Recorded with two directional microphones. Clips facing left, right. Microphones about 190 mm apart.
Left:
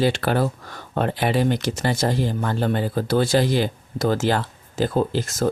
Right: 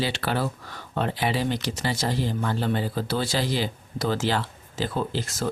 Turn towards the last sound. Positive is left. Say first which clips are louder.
# left 6 dB
turn(degrees=45)  # may be behind; listen again after turning